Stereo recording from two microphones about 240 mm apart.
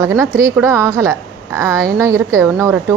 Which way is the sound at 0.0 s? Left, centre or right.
Centre.